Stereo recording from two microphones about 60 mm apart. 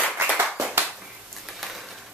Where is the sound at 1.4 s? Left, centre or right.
Centre.